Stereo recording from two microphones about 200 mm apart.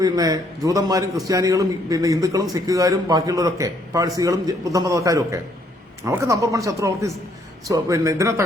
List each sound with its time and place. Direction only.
0.0 s a man's voice: 20° right (ahead or behind)